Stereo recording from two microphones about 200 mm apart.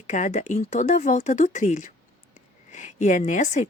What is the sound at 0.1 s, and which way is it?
A woman's voice, 35° left (ahead or behind).